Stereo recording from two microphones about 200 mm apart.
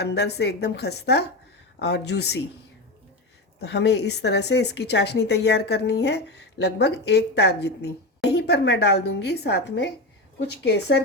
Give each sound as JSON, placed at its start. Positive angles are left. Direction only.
{"t": 0.0, "sound": "a woman's voice", "side_deg": 55}
{"t": 3.6, "sound": "a woman's voice", "side_deg": 55}